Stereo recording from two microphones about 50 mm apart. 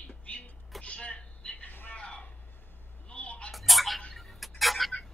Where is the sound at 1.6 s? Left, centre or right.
Left.